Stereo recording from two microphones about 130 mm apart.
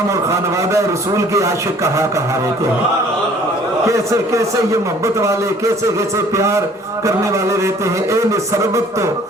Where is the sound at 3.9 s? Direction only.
25° right (ahead or behind).